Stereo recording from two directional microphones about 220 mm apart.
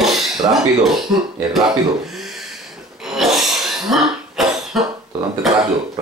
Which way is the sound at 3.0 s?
Centre (ahead or behind).